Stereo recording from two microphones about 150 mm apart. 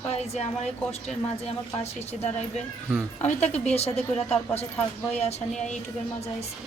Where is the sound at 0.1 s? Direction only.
45° left (ahead or behind).